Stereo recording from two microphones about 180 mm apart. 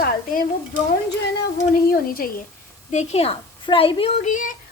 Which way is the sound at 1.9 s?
55° left (ahead or behind).